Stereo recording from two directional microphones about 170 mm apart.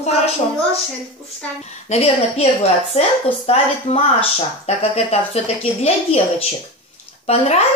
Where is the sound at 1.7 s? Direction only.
40° left (ahead or behind).